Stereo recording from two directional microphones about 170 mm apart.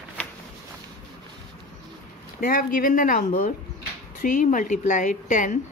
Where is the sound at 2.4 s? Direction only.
55° left (ahead or behind).